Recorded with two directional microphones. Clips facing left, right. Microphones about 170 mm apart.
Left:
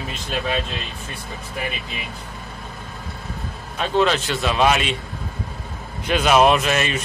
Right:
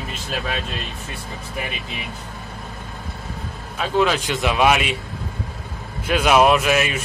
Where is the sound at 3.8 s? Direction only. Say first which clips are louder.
Even; 10° right (ahead or behind).